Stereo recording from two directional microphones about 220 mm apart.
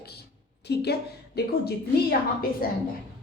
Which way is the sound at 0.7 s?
50° left (ahead or behind).